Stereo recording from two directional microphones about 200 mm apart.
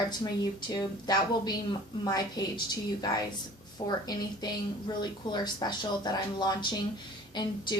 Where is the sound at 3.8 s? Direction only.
20° left (ahead or behind).